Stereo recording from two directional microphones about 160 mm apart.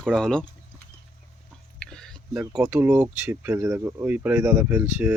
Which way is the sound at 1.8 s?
5° left (ahead or behind).